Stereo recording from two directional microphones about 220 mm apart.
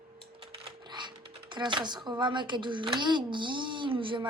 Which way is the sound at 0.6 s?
20° right (ahead or behind).